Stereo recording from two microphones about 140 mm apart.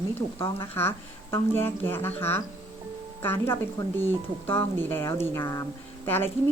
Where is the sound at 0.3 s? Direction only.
20° left (ahead or behind).